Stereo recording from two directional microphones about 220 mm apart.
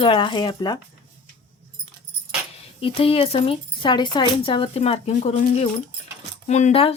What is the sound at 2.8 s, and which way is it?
Speech, 25° left (ahead or behind).